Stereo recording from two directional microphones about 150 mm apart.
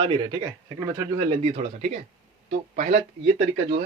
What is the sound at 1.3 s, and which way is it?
Speech, 45° right (ahead or behind).